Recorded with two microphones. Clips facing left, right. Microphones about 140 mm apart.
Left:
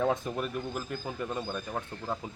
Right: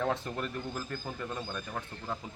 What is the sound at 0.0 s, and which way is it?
Speech, 10° left (ahead or behind).